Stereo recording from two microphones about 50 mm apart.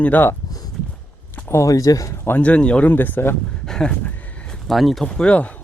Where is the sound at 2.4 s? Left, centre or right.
Left.